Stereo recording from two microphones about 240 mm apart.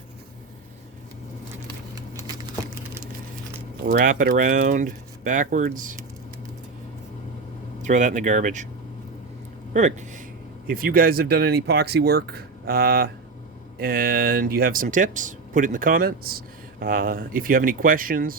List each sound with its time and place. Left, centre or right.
3.8 s speech: right
7.8 s speech: right
9.7 s speech: right